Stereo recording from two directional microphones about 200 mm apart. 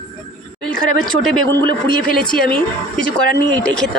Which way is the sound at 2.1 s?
45° left (ahead or behind).